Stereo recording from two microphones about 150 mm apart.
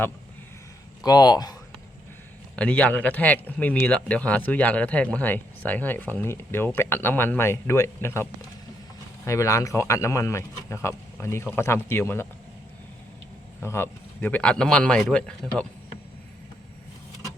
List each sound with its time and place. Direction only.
1.0 s a man's voice: 25° left (ahead or behind)
2.6 s a man's voice: 10° left (ahead or behind)
13.6 s speech: 15° left (ahead or behind)